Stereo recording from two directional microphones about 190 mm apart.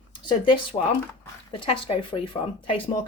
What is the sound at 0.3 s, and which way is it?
A woman's voice, 25° left (ahead or behind).